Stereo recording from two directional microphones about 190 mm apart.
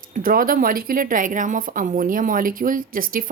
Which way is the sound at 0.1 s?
50° right (ahead or behind).